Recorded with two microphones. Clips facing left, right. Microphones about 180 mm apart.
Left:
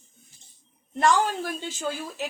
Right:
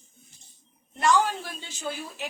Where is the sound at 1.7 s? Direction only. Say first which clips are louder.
Left 3 dB; 40° left (ahead or behind).